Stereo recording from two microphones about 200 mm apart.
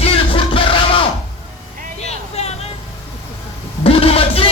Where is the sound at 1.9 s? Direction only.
30° left (ahead or behind).